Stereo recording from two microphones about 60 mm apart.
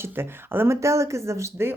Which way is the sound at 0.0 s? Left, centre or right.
Right.